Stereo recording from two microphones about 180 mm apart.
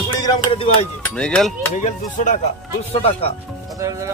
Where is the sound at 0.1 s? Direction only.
20° left (ahead or behind).